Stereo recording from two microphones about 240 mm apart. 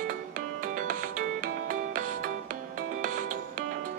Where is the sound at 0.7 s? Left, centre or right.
Right.